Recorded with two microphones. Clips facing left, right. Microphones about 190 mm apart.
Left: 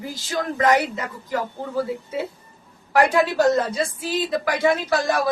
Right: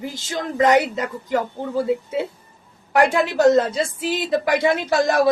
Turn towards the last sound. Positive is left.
turn(degrees=-25)  # may be behind; listen again after turning